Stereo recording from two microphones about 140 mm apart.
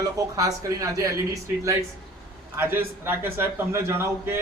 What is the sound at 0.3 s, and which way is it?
A man's voice, 25° right (ahead or behind).